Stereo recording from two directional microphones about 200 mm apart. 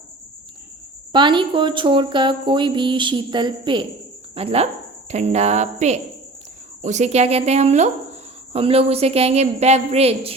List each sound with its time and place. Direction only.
1.1 s a woman's voice: 25° right (ahead or behind)